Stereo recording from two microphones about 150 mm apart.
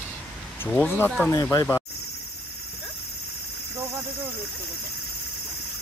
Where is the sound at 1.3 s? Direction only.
25° left (ahead or behind).